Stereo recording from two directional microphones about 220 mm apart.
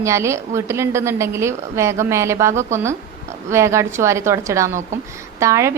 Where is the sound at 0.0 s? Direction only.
10° right (ahead or behind).